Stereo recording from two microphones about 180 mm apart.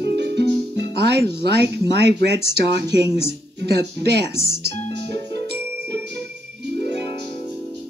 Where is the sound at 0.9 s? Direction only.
70° right (ahead or behind).